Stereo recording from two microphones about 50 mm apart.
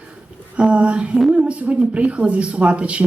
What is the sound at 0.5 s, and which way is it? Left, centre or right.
Speech, right.